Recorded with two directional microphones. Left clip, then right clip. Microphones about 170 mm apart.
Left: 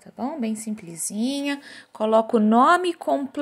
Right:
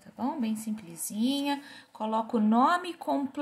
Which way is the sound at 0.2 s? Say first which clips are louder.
Left 4 dB; 35° left (ahead or behind).